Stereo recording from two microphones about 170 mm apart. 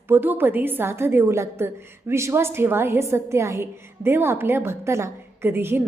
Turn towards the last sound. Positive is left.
turn(degrees=-15)  # may be behind; listen again after turning